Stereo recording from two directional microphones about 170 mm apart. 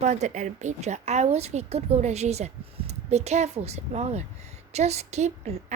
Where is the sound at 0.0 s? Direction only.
45° right (ahead or behind).